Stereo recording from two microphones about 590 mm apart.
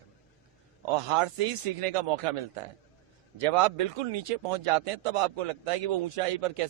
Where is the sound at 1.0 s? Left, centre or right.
Right.